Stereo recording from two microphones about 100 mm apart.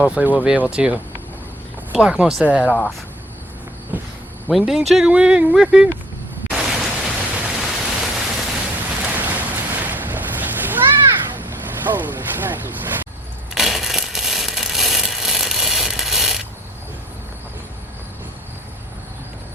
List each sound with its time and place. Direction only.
0.0 s speech: 15° right (ahead or behind)
2.6 s speech: 10° left (ahead or behind)
3.9 s walk: 20° right (ahead or behind)
4.4 s speech: centre (ahead or behind)
6.5 s pink noise: 5° right (ahead or behind)
7.6 s a sound: 5° right (ahead or behind)
9.0 s cat: 15° right (ahead or behind)
11.9 s a sound: 20° right (ahead or behind)
13.5 s a sound: centre (ahead or behind)